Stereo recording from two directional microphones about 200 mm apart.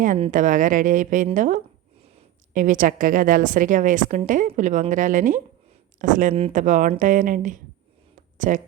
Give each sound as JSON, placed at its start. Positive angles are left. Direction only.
{"t": 0.3, "sound": "a woman's voice", "side_deg": -40}